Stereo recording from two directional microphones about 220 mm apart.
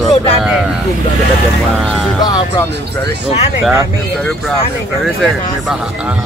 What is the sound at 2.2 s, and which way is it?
Speech, 20° left (ahead or behind).